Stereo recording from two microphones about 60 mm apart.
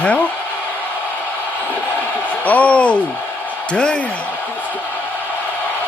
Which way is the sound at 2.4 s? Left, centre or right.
Left.